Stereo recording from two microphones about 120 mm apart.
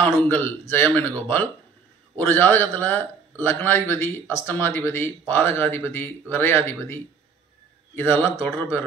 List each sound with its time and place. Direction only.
0.0 s a man's voice: 15° left (ahead or behind)
2.1 s a man's voice: 15° left (ahead or behind)